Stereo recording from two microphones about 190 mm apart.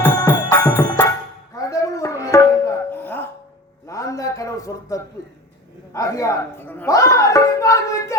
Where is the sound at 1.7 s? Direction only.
15° left (ahead or behind).